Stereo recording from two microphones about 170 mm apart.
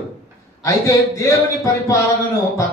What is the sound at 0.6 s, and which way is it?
A man's voice, 20° left (ahead or behind).